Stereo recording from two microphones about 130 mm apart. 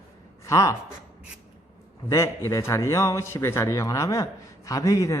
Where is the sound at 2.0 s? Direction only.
20° left (ahead or behind).